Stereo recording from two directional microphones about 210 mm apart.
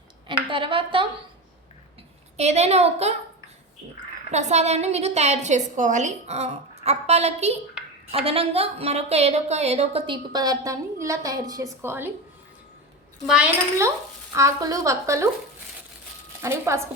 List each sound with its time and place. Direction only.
0.3 s a woman's voice: 25° right (ahead or behind)
2.4 s a woman's voice: 30° right (ahead or behind)
4.3 s a woman's voice: 35° right (ahead or behind); by 12.1 s 10° right (ahead or behind)
13.2 s speech: 5° right (ahead or behind)
16.4 s speech: 15° right (ahead or behind)